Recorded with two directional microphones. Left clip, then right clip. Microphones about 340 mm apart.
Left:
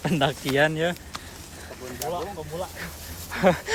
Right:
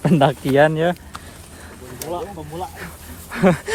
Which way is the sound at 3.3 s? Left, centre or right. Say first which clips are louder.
Right 3 dB; centre.